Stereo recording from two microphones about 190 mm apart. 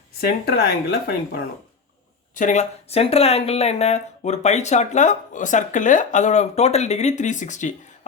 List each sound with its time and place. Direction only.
0.2 s speech: 55° left (ahead or behind)
2.3 s speech: 40° left (ahead or behind)